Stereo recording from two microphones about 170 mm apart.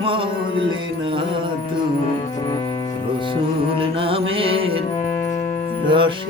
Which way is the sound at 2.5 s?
30° left (ahead or behind).